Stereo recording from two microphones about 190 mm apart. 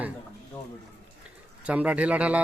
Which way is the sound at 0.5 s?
15° left (ahead or behind).